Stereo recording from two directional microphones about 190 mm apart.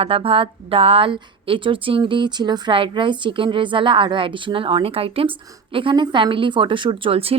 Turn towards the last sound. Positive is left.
turn(degrees=-30)  # may be behind; listen again after turning